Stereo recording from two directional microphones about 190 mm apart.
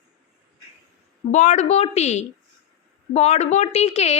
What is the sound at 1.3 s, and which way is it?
A woman's voice, 40° left (ahead or behind).